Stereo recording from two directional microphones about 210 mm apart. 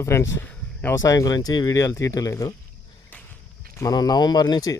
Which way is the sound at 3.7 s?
15° left (ahead or behind).